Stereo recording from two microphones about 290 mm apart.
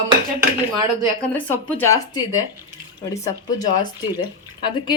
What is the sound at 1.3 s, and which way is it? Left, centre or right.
Speech, centre.